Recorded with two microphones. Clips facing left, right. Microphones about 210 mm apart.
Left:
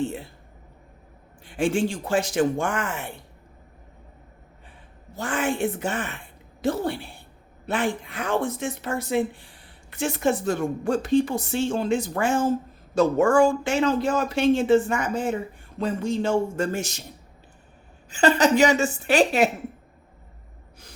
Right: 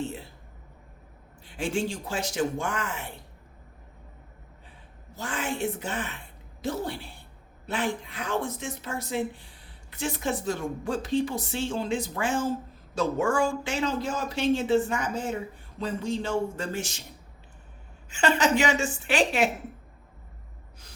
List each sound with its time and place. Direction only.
1.5 s speech: 50° left (ahead or behind)
5.1 s speech: 50° left (ahead or behind)
7.7 s speech: 50° left (ahead or behind)
18.1 s a woman's voice: 35° left (ahead or behind)